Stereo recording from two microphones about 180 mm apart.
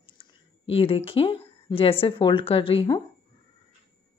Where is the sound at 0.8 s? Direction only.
30° left (ahead or behind).